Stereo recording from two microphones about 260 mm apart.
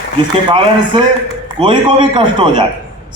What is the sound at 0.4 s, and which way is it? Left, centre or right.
A man's voice, centre.